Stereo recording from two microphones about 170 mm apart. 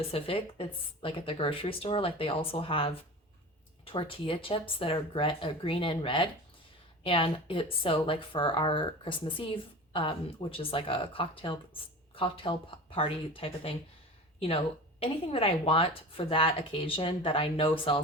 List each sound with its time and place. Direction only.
0.1 s speech: 35° left (ahead or behind)